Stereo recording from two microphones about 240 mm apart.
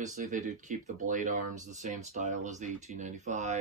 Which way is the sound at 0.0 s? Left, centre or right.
Right.